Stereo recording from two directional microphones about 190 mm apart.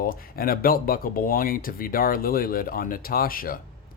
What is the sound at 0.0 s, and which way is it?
Speech, 50° left (ahead or behind).